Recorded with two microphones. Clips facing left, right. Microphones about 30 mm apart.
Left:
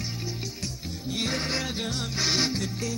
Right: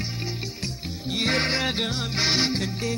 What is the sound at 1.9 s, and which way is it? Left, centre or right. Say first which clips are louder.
Music: right 3 dB; right.